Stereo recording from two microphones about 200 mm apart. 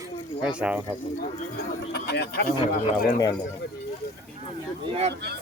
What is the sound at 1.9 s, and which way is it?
Speech, 55° left (ahead or behind).